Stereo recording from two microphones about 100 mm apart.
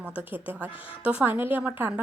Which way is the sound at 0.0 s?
15° right (ahead or behind).